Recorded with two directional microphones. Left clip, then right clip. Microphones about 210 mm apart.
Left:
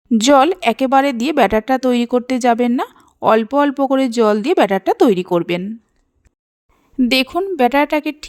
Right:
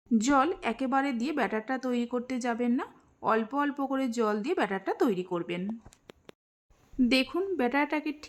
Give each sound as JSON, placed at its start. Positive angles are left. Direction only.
{"t": 0.1, "sound": "speech", "side_deg": 40}
{"t": 7.0, "sound": "speech", "side_deg": 35}